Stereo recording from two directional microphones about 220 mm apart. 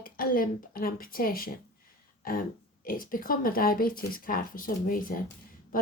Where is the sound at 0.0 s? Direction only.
40° left (ahead or behind).